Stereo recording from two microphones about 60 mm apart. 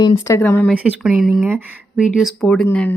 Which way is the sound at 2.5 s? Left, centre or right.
Centre.